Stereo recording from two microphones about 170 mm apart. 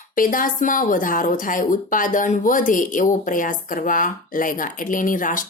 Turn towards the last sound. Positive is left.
turn(degrees=50)  # may be behind; listen again after turning